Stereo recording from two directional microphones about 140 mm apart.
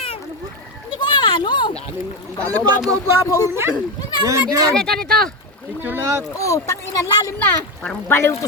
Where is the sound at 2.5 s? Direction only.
30° right (ahead or behind).